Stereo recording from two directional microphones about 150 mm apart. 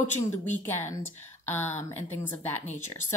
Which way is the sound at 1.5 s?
15° left (ahead or behind).